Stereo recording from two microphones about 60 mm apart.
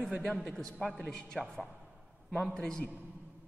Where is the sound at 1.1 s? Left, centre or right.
Centre.